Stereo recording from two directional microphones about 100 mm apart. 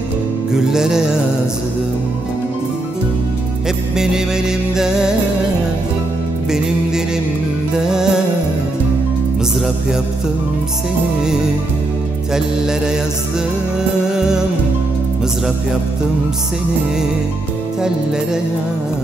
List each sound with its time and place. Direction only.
0.5 s music: 5° right (ahead or behind)
3.6 s music: 5° right (ahead or behind)
7.7 s music: 5° right (ahead or behind)
12.4 s music: 5° right (ahead or behind)
14.1 s music: 5° right (ahead or behind)
17.8 s music: 5° right (ahead or behind)